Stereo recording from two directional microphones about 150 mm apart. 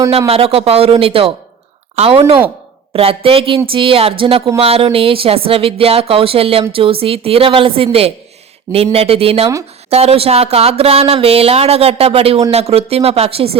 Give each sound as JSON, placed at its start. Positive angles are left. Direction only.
{"t": 0.3, "sound": "speech", "side_deg": -40}